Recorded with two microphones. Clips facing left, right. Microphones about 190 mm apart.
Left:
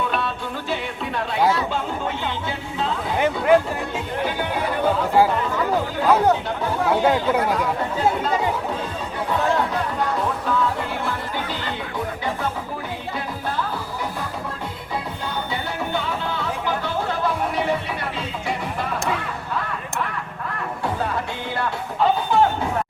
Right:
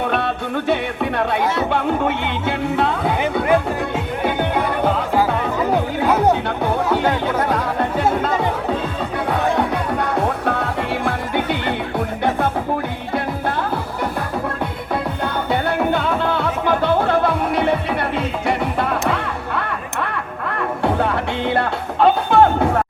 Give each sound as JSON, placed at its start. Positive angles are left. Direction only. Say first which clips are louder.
{"t": 0.0, "sound": "music", "louder": "right 4 dB", "side_deg": -60}
{"t": 7.1, "sound": "chatter", "louder": "right 1 dB", "side_deg": -65}
{"t": 11.9, "sound": "music", "louder": "right 6 dB", "side_deg": -65}
{"t": 13.6, "sound": "music", "louder": "right 5 dB", "side_deg": -60}